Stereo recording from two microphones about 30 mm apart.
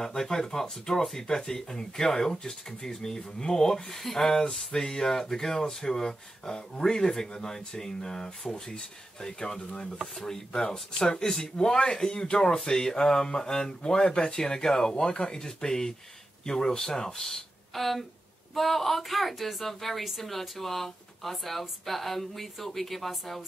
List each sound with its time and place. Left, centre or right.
0.0 s speech: centre
17.7 s speech: centre